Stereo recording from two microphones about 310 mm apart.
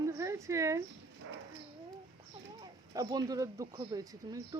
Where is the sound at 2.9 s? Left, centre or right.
Centre.